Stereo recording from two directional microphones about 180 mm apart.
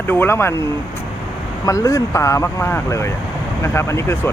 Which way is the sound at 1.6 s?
20° left (ahead or behind).